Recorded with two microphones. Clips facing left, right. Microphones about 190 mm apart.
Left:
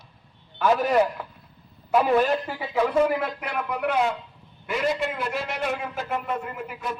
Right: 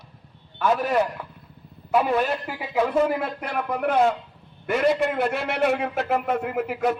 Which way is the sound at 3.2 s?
35° right (ahead or behind).